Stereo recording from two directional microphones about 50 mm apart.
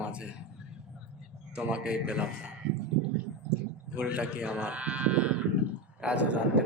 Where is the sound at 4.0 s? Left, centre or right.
Right.